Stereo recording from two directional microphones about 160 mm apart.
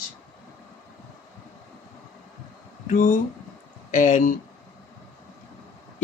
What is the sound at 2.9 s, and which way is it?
Speech, 55° left (ahead or behind).